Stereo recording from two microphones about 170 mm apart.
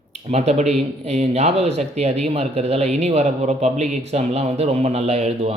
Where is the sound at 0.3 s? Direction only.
40° right (ahead or behind).